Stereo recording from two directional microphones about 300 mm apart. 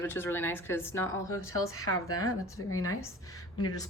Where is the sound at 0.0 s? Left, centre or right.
Centre.